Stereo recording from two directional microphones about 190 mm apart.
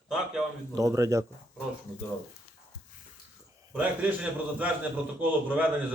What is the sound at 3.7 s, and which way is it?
Speech, 5° right (ahead or behind).